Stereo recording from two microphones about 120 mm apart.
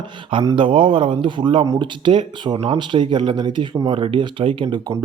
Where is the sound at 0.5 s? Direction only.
45° right (ahead or behind).